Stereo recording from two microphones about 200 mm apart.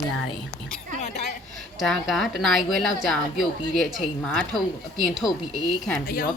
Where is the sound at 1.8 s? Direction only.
Centre (ahead or behind).